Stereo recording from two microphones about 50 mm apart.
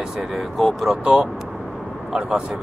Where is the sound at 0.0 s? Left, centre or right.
Centre.